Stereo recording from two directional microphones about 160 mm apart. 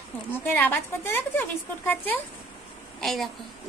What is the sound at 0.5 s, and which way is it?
Speech, 10° left (ahead or behind).